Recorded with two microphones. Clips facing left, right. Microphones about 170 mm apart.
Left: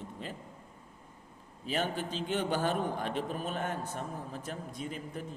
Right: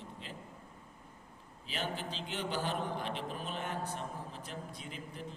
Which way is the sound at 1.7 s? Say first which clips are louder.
Left 6 dB; 50° left (ahead or behind).